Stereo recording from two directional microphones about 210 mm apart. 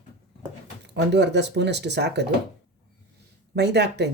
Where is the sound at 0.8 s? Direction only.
55° right (ahead or behind).